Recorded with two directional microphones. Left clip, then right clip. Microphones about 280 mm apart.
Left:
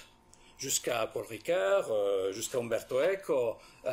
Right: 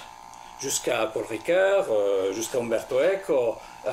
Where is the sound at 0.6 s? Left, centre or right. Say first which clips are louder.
Right 6 dB; centre.